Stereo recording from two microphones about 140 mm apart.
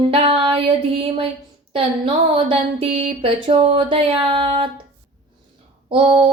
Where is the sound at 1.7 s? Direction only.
40° right (ahead or behind).